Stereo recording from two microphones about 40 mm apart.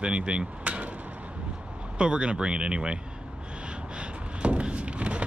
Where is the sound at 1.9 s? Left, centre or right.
Right.